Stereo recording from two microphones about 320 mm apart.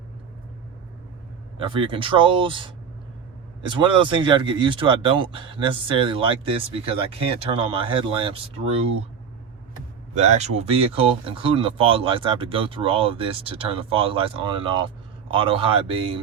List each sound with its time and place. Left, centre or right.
1.5 s speech: centre
10.2 s speech: right